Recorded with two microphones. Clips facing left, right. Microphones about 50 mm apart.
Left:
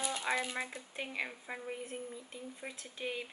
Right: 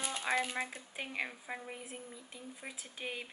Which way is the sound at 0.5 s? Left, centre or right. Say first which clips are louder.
Even; centre.